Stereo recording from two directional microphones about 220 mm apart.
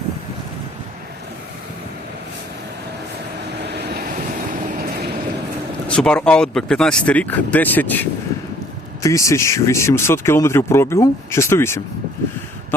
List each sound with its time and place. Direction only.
3.6 s vehicle: 45° right (ahead or behind)
5.9 s speech: 5° left (ahead or behind)
9.0 s speech: 15° left (ahead or behind)